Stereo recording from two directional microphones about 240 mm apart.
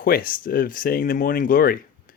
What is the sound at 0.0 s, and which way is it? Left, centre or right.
Speech, left.